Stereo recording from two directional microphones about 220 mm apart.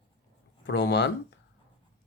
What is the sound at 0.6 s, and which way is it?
Speech, 50° left (ahead or behind).